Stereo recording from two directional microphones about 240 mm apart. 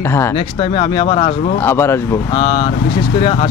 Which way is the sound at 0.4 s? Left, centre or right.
Left.